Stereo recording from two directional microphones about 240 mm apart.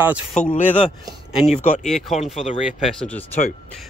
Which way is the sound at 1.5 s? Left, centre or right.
Left.